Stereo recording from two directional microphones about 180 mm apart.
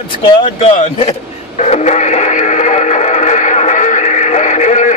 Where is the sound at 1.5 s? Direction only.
40° left (ahead or behind).